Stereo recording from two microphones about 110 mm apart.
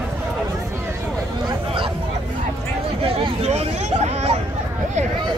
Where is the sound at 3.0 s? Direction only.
65° right (ahead or behind).